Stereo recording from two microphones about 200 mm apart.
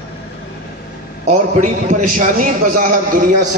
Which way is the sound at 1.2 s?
40° right (ahead or behind).